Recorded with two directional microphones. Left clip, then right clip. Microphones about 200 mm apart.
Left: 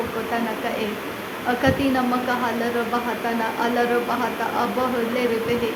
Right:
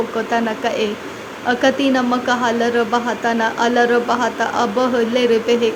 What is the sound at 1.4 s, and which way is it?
Speech, 25° right (ahead or behind).